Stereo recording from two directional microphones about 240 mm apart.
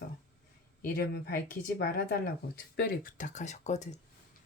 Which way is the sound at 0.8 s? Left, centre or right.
Left.